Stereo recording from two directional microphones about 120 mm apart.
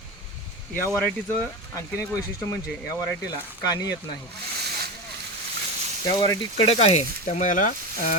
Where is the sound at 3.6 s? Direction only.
35° left (ahead or behind).